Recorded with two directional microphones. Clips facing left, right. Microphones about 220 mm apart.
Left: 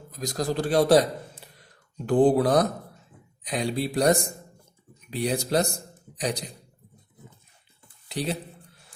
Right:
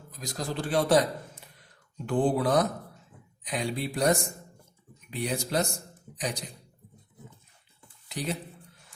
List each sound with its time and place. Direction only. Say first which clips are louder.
0.1 s a man's voice: left 6 dB; 40° left (ahead or behind)
8.0 s speech: left 4 dB; 30° left (ahead or behind)